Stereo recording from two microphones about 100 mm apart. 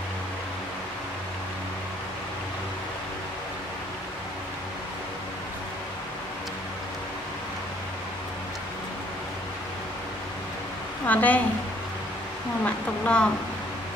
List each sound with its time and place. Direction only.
11.1 s speech: 15° left (ahead or behind)
12.6 s speech: 10° left (ahead or behind)